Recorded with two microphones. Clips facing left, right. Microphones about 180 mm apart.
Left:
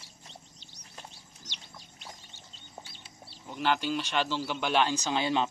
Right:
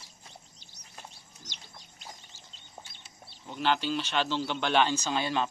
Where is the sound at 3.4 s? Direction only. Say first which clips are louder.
Even; 10° left (ahead or behind).